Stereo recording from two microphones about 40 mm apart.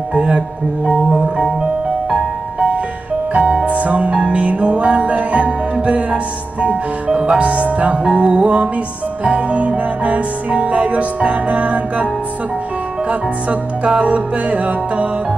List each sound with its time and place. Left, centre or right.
0.1 s music: right
3.3 s music: right
13.1 s music: right